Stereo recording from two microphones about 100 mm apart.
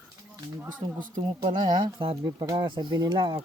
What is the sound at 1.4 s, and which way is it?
Speech, 50° right (ahead or behind).